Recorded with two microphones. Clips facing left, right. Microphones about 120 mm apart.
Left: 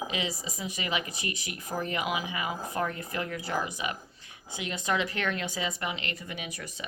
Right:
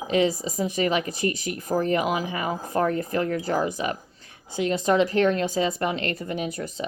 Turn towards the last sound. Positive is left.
turn(degrees=-40)  # may be behind; listen again after turning